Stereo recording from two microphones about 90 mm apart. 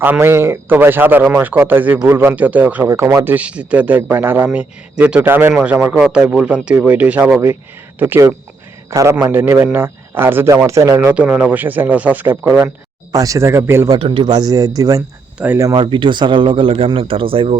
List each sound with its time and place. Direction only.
0.0 s a man's voice: 25° right (ahead or behind)
2.8 s a man's voice: 30° right (ahead or behind)
3.2 s a man's voice: 15° right (ahead or behind)
5.9 s a man's voice: 10° right (ahead or behind)
10.7 s speech: 35° right (ahead or behind)
11.1 s speech: 15° right (ahead or behind)
13.1 s speech: 40° right (ahead or behind)
13.9 s speech: 70° right (ahead or behind)
14.3 s speech: 45° right (ahead or behind)
15.4 s speech: 15° right (ahead or behind)
15.7 s speech: 65° right (ahead or behind); by 17.6 s 90° right